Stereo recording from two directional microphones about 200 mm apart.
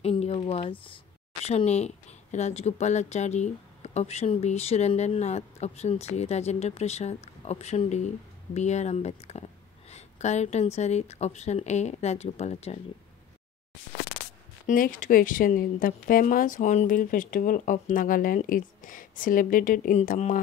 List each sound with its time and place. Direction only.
0.0 s a sound: 30° left (ahead or behind)
1.4 s speech: 30° left (ahead or behind)
14.7 s a woman's voice: 40° left (ahead or behind)